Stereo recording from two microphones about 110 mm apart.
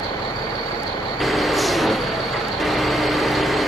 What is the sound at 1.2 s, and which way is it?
Vehicle, centre (ahead or behind).